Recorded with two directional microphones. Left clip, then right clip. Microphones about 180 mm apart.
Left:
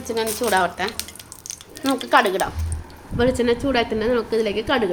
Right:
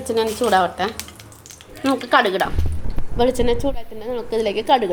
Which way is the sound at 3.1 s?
20° right (ahead or behind).